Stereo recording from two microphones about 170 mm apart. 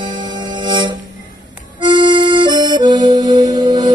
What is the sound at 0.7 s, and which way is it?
Music, 25° right (ahead or behind).